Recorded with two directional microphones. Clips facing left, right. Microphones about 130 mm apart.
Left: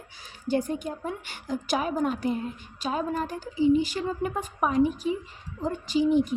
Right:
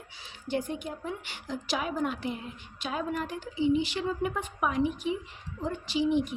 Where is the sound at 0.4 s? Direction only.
40° left (ahead or behind).